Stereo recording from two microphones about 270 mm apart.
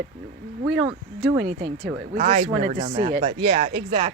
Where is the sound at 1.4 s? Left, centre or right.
Right.